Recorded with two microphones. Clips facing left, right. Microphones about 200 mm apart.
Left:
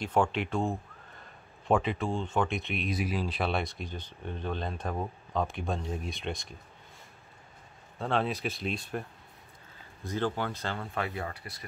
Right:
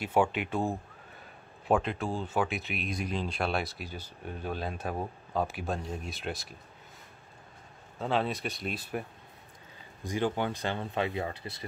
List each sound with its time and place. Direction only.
0.0 s speech: 5° right (ahead or behind)
8.0 s speech: centre (ahead or behind)
10.0 s speech: 15° right (ahead or behind)